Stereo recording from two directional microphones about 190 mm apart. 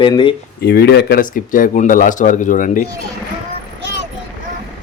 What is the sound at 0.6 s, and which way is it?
Speech, 60° left (ahead or behind).